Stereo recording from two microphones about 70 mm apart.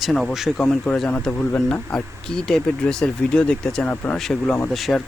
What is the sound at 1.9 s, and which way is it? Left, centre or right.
Speech, centre.